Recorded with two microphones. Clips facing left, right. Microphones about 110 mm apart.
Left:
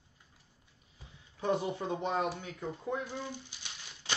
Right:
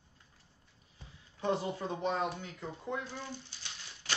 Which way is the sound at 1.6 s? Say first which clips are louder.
Left 1 dB; 20° left (ahead or behind).